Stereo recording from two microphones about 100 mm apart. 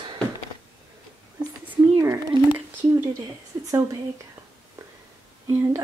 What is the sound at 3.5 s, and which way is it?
Speech, 25° right (ahead or behind).